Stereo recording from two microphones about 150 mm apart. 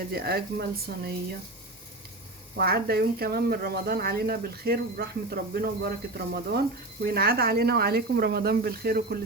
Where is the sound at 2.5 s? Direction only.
90° right.